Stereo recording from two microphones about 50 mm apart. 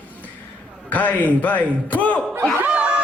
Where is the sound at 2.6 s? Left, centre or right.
Right.